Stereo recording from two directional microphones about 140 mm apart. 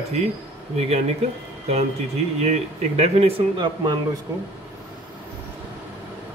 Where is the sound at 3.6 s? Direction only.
35° right (ahead or behind).